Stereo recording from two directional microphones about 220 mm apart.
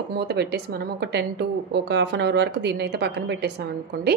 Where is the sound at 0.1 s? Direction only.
50° right (ahead or behind).